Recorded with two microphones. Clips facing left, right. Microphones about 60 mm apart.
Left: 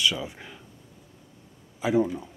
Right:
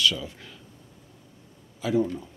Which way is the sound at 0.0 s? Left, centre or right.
Centre.